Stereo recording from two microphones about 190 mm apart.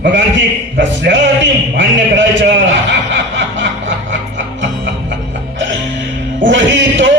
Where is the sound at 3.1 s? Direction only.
75° right (ahead or behind).